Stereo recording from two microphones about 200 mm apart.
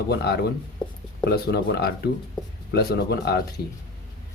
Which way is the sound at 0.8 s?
25° left (ahead or behind).